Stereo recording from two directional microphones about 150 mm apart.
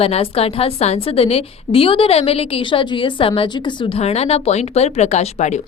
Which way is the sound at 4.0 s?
45° left (ahead or behind).